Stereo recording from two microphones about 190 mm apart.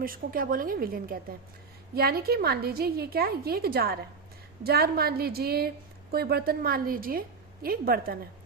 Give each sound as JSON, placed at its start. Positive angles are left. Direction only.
{"t": 0.0, "sound": "a woman's voice", "side_deg": -50}